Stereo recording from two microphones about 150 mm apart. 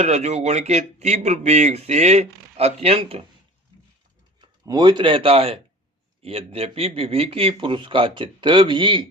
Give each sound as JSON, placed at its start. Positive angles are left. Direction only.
{"t": 0.0, "sound": "speech", "side_deg": -45}
{"t": 4.4, "sound": "speech", "side_deg": -30}